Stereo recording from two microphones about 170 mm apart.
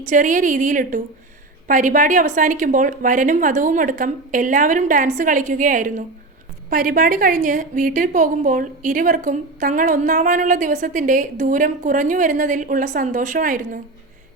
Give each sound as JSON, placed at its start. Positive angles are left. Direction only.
{"t": 0.1, "sound": "a woman's voice", "side_deg": -50}